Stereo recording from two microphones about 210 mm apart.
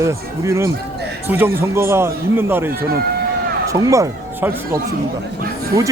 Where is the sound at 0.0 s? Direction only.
15° right (ahead or behind).